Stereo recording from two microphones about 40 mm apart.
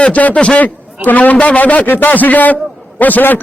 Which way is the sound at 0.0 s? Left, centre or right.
Left.